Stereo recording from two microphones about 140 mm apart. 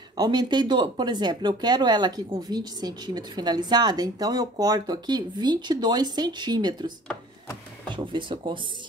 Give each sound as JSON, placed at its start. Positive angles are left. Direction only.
{"t": 0.2, "sound": "speech", "side_deg": -30}
{"t": 7.9, "sound": "speech", "side_deg": -35}